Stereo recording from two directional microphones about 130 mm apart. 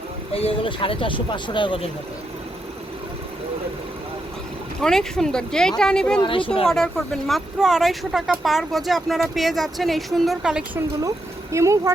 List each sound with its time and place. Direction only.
0.3 s speech: 45° left (ahead or behind)
4.8 s speech: 5° left (ahead or behind)
6.2 s speech: 40° left (ahead or behind)
6.7 s speech: 5° left (ahead or behind)
11.5 s speech: 25° right (ahead or behind)